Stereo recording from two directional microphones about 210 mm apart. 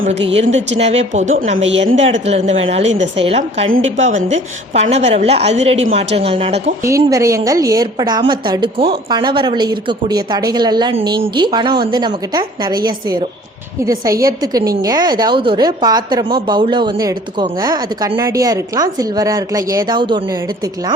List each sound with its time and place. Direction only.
0.3 s a woman's voice: 30° right (ahead or behind)
6.8 s a woman's voice: 15° right (ahead or behind)